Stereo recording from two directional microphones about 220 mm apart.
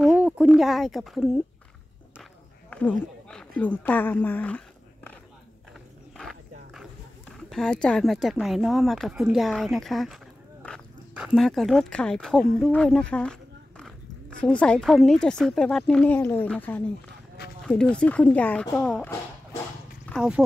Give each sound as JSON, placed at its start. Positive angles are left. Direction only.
{"t": 0.5, "sound": "a woman's voice", "side_deg": 0}
{"t": 2.7, "sound": "speech", "side_deg": 5}
{"t": 6.1, "sound": "a woman's voice", "side_deg": 0}